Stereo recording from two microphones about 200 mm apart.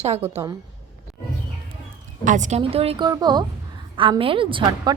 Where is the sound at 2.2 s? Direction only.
40° right (ahead or behind); by 4.9 s 25° right (ahead or behind).